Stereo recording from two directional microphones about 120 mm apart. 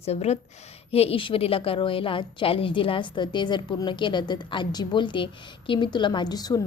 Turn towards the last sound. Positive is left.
turn(degrees=35)  # may be behind; listen again after turning